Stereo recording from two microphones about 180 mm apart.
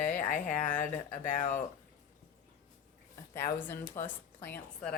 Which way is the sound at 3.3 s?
15° left (ahead or behind).